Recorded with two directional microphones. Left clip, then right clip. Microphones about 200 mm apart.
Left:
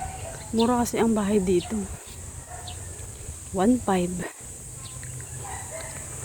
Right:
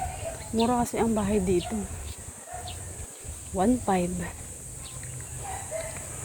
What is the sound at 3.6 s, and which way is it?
Speech, 25° left (ahead or behind).